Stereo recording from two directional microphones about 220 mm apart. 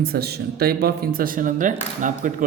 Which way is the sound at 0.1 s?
45° right (ahead or behind).